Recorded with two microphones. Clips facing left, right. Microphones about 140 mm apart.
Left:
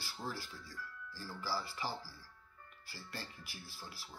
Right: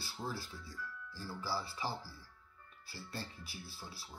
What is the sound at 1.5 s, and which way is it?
Speech, 20° right (ahead or behind).